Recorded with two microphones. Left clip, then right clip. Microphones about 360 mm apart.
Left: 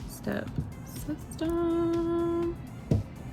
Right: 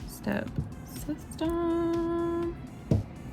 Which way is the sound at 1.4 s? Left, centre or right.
Right.